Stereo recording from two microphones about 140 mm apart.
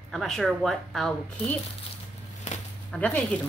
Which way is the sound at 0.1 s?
Centre (ahead or behind).